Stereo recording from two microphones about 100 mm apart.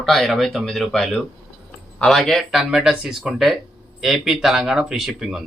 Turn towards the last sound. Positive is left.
turn(degrees=-5)  # may be behind; listen again after turning